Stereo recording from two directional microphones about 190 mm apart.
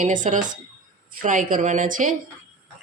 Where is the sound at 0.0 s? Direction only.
40° right (ahead or behind).